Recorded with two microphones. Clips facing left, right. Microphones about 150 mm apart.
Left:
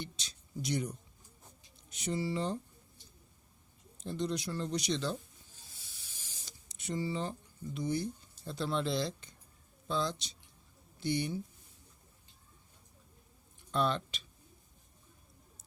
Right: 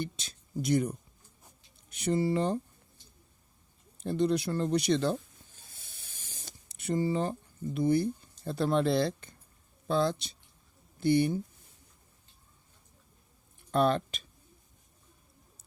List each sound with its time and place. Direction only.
0.0 s speech: 55° right (ahead or behind)
3.9 s a sound: 55° right (ahead or behind)
9.8 s speech: 55° right (ahead or behind)
13.7 s speech: 50° right (ahead or behind)